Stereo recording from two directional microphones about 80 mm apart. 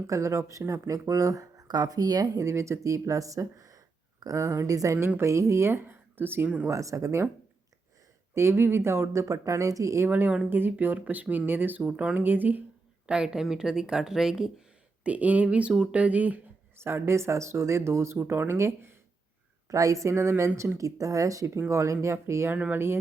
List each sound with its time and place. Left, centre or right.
0.1 s speech: right
4.9 s speech: right
6.7 s speech: right
8.4 s speech: right
10.1 s speech: centre
13.1 s a woman's voice: centre
15.0 s a woman's voice: centre
16.7 s speech: right
19.6 s speech: right
22.5 s speech: centre